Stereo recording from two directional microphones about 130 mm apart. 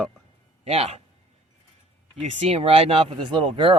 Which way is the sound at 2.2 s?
55° right (ahead or behind).